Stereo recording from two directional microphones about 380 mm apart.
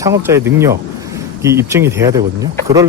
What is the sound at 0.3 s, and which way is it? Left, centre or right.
Speech, centre.